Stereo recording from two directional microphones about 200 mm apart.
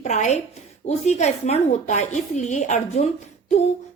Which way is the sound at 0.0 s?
35° left (ahead or behind).